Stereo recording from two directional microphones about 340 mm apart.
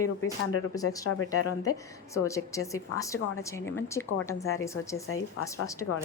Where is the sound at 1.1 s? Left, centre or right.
Left.